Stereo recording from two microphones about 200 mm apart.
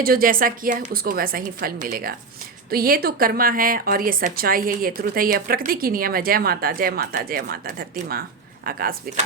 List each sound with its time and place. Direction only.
0.0 s a woman's voice: 45° right (ahead or behind)